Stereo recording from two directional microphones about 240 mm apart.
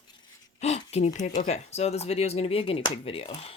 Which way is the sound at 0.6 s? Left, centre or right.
Left.